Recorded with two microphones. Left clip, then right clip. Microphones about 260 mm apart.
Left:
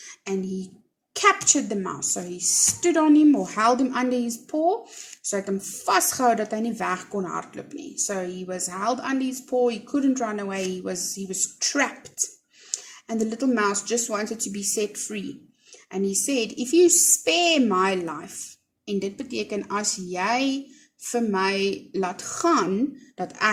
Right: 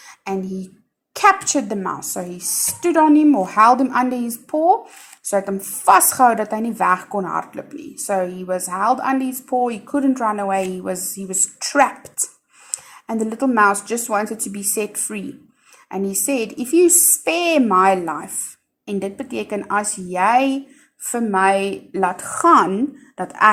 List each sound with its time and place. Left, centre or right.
0.0 s a sound: centre
1.1 s a woman's voice: centre
13.1 s a woman's voice: centre